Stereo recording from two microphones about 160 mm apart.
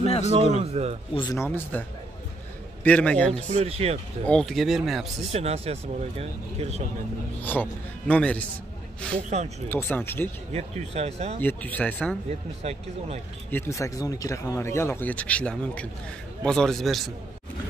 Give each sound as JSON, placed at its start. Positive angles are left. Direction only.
{"t": 0.0, "sound": "a sound", "side_deg": 40}
{"t": 0.7, "sound": "speech", "side_deg": -40}
{"t": 1.1, "sound": "speech", "side_deg": 25}
{"t": 1.4, "sound": "speech", "side_deg": 10}
{"t": 3.5, "sound": "speech", "side_deg": -40}
{"t": 4.3, "sound": "speech", "side_deg": 5}
{"t": 5.3, "sound": "speech", "side_deg": -40}
{"t": 7.5, "sound": "speech", "side_deg": 10}
{"t": 10.5, "sound": "speech", "side_deg": -40}
{"t": 11.4, "sound": "speech", "side_deg": 10}
{"t": 12.6, "sound": "speech", "side_deg": -45}
{"t": 13.5, "sound": "speech", "side_deg": 15}